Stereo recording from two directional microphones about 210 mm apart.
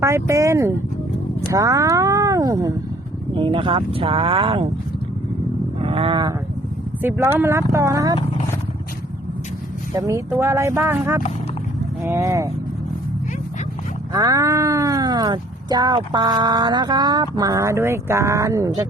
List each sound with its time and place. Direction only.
0.0 s speech: 15° right (ahead or behind)
5.8 s wild animals: 25° right (ahead or behind)
7.3 s speech: 10° right (ahead or behind)
9.9 s speech: 15° right (ahead or behind)
14.1 s speech: 15° right (ahead or behind)